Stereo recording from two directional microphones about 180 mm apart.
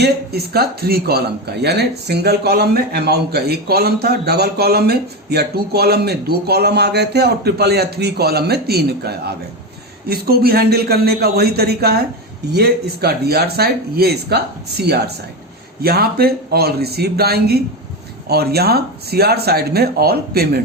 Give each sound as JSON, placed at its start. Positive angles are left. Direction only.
{"t": 0.0, "sound": "a man's voice", "side_deg": -65}